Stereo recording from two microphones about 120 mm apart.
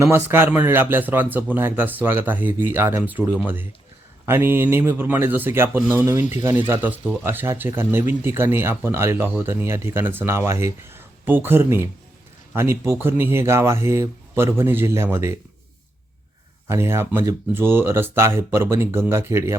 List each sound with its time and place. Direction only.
0.0 s speech: 20° right (ahead or behind)
16.6 s speech: 20° right (ahead or behind)